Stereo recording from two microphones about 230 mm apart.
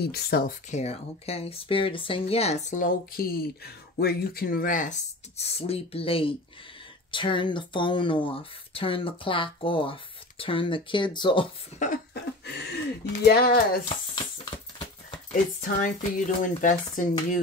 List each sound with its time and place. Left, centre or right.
0.0 s speech: left
0.7 s speech: left
11.8 s cough: left
13.2 s speech: left
14.1 s a sound: centre
15.6 s speech: left